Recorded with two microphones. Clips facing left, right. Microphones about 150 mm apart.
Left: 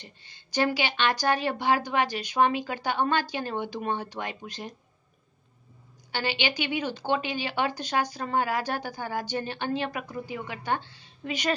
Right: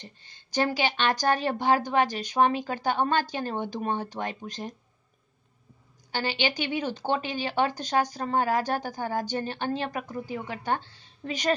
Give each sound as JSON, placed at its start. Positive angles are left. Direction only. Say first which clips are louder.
{"t": 0.0, "sound": "a woman's voice", "louder": "right 2 dB", "side_deg": -45}
{"t": 6.1, "sound": "a woman's voice", "louder": "right 1 dB", "side_deg": -40}